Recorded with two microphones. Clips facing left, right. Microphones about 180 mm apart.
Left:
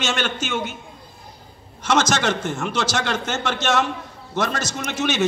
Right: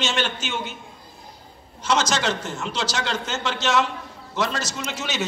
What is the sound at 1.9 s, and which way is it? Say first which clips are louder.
A man's voice: left 3 dB; 50° left (ahead or behind).